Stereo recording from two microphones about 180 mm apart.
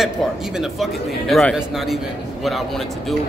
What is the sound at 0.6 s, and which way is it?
A man's voice, centre (ahead or behind).